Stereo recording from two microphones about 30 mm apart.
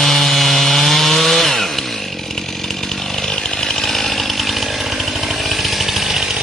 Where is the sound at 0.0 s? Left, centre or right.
Centre.